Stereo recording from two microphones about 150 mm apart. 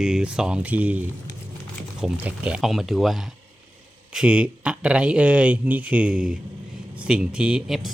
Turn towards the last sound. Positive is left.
turn(degrees=0)  # may be behind; listen again after turning